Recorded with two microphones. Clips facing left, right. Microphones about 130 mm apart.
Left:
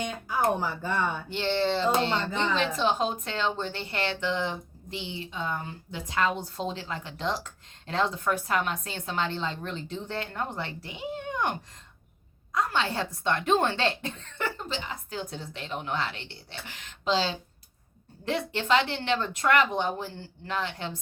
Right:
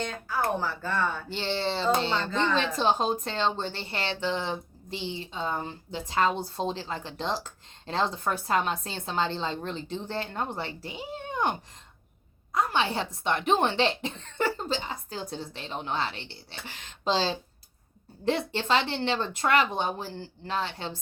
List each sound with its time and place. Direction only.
0.0 s speech: 15° left (ahead or behind)
1.3 s speech: 30° right (ahead or behind)
12.5 s speech: 25° right (ahead or behind)